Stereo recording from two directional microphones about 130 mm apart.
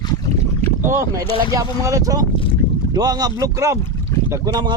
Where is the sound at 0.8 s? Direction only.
20° right (ahead or behind).